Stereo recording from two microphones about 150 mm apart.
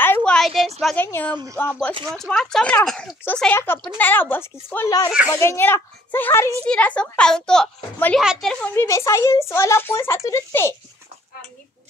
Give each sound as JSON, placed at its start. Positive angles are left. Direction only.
{"t": 0.0, "sound": "a sound", "side_deg": 10}
{"t": 0.9, "sound": "a child's voice", "side_deg": 15}
{"t": 8.7, "sound": "speech", "side_deg": 20}